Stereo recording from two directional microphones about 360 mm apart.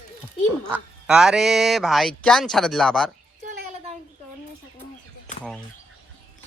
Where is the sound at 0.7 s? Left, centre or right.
Centre.